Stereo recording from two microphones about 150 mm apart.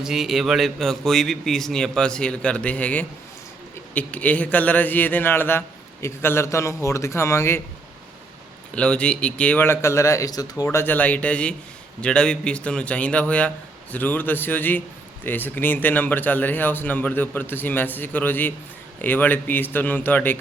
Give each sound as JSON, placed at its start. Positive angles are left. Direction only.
{"t": 0.0, "sound": "a man's voice", "side_deg": 0}
{"t": 8.7, "sound": "a man's voice", "side_deg": 5}